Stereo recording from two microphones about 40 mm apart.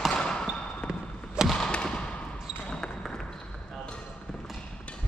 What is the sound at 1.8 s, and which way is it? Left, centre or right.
Basketball bounce, left.